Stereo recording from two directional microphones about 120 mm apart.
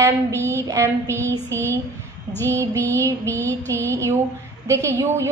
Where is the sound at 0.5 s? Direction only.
25° right (ahead or behind).